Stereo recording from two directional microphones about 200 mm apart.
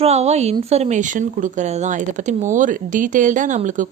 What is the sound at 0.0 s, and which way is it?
Speech, 30° right (ahead or behind).